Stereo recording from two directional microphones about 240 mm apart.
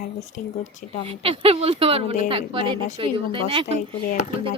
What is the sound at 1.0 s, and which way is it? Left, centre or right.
Speech, right.